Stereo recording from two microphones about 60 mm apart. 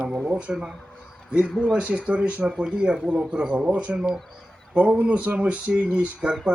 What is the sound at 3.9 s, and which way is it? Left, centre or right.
Speech, centre.